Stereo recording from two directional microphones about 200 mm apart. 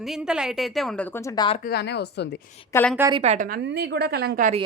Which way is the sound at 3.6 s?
55° right (ahead or behind).